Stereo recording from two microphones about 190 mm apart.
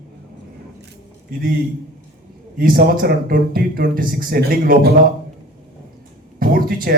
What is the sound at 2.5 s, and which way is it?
A man's voice, 50° right (ahead or behind).